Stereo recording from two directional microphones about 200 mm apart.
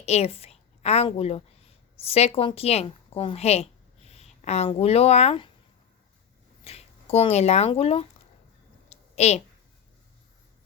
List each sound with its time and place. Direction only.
0.0 s a woman's voice: 30° left (ahead or behind)
6.7 s speech: 30° left (ahead or behind)
8.9 s a sound: 35° left (ahead or behind)